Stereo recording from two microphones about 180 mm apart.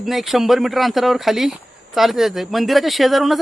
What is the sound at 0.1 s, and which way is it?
Speech, centre (ahead or behind).